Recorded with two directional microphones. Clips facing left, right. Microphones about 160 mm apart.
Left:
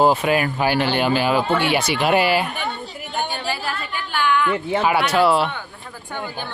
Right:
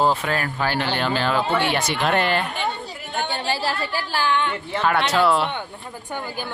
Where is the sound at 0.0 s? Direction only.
10° left (ahead or behind).